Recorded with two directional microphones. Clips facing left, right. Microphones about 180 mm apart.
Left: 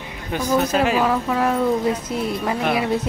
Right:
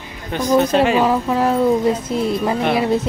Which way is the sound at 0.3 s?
10° left (ahead or behind).